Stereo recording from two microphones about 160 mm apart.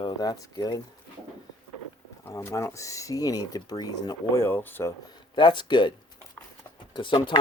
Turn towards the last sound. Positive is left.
turn(degrees=30)  # may be behind; listen again after turning